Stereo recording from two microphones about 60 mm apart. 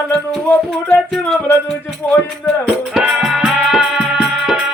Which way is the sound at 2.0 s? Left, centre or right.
Left.